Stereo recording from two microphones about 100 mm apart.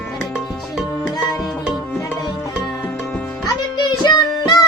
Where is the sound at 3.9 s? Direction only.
45° left (ahead or behind).